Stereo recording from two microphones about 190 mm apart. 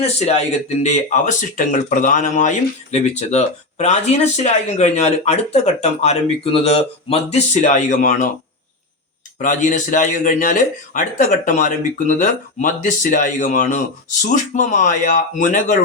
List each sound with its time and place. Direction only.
0.0 s speech: 35° left (ahead or behind)
9.4 s speech: 40° left (ahead or behind)